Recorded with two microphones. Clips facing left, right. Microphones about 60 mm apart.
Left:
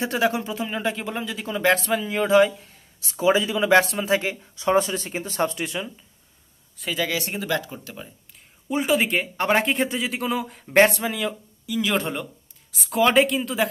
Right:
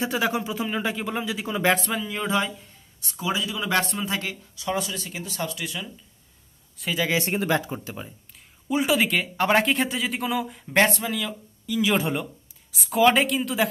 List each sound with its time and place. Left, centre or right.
0.0 s speech: centre
3.2 s speech: left
6.8 s speech: centre
7.1 s speech: right
8.9 s speech: centre
11.0 s speech: centre
11.6 s speech: centre